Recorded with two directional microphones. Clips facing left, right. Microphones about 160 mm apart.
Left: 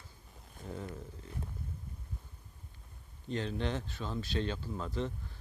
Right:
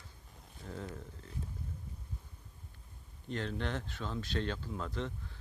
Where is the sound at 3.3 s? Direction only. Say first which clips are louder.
Left 2 dB; 15° left (ahead or behind).